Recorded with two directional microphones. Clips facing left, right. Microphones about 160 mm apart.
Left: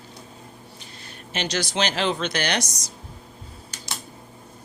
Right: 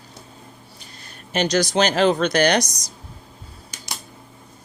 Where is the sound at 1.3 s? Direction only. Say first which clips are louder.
Right 7 dB; 45° right (ahead or behind).